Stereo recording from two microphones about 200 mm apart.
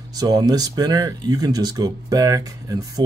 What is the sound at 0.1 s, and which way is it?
Speech, 20° right (ahead or behind).